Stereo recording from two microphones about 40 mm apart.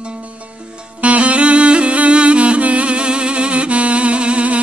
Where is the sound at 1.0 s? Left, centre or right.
Right.